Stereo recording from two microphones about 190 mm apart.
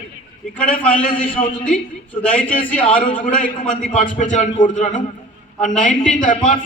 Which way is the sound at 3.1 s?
45° left (ahead or behind).